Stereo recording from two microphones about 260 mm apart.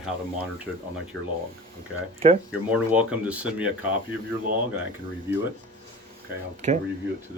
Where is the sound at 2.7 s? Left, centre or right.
Centre.